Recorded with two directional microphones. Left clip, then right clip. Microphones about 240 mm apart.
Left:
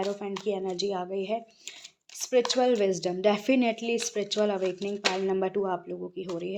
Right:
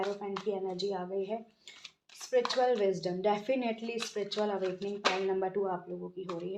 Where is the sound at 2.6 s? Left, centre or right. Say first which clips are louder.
Left 4 dB; left.